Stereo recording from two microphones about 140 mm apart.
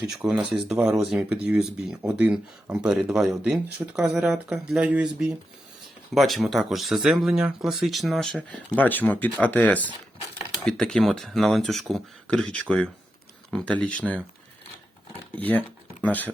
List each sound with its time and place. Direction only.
0.1 s speech: 5° right (ahead or behind)
15.4 s speech: 10° left (ahead or behind)